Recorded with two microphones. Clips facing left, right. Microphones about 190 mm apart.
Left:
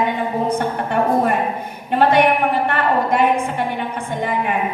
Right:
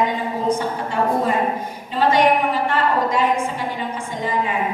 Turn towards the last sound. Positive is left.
turn(degrees=60)  # may be behind; listen again after turning